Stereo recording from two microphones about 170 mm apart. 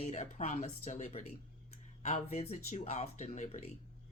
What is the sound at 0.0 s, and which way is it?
Speech, 40° left (ahead or behind).